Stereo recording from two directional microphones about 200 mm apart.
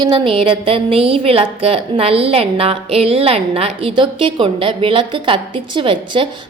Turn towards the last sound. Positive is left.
turn(degrees=-25)  # may be behind; listen again after turning